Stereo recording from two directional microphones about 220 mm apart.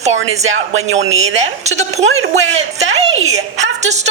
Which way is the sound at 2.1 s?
65° right (ahead or behind).